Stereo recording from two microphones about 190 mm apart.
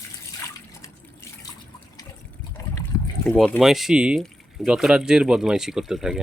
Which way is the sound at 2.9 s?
15° left (ahead or behind).